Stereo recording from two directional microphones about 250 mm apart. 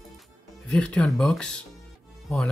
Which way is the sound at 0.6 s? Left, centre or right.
Centre.